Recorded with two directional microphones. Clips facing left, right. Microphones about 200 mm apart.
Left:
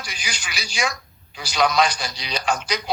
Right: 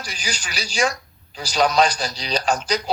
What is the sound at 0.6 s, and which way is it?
Speech, 10° left (ahead or behind).